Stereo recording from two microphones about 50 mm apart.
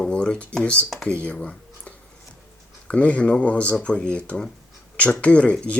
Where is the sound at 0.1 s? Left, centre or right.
Left.